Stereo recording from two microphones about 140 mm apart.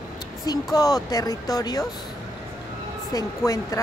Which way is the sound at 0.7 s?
25° left (ahead or behind).